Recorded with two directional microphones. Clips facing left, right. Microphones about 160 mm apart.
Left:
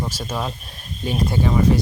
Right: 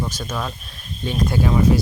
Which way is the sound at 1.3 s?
Centre (ahead or behind).